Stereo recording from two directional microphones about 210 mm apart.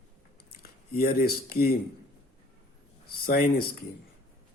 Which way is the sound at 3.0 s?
45° left (ahead or behind).